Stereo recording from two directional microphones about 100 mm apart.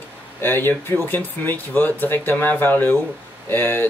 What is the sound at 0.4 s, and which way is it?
Speech, 20° left (ahead or behind).